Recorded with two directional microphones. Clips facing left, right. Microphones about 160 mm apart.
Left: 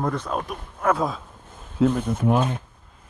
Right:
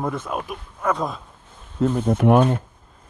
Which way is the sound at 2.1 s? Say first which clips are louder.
Right 5 dB; 60° right (ahead or behind).